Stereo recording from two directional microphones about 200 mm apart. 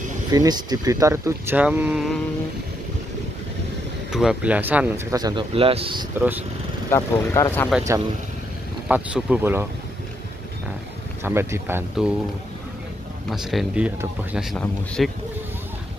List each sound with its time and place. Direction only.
0.3 s speech: 20° right (ahead or behind); by 2.2 s centre (ahead or behind)
4.1 s speech: centre (ahead or behind); by 6.0 s 25° right (ahead or behind)
7.0 s speech: 15° left (ahead or behind)
8.8 s speech: 5° right (ahead or behind)
11.2 s speech: 10° right (ahead or behind)
13.3 s speech: centre (ahead or behind)